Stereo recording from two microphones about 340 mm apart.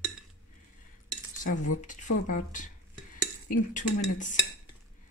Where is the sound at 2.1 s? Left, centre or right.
Left.